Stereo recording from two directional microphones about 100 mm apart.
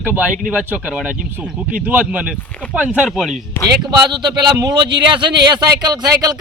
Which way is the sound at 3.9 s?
50° right (ahead or behind).